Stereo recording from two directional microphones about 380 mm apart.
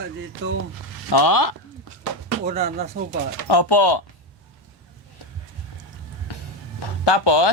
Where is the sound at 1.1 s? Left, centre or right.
Left.